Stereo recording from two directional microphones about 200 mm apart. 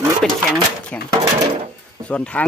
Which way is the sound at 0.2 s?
5° left (ahead or behind).